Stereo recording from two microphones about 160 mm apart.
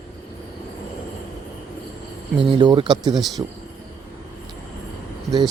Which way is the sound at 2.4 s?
30° right (ahead or behind).